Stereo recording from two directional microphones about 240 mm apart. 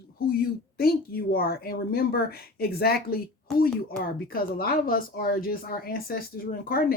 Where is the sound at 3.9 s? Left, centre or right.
Left.